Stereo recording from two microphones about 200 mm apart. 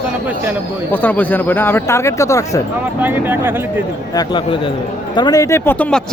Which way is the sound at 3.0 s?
10° right (ahead or behind).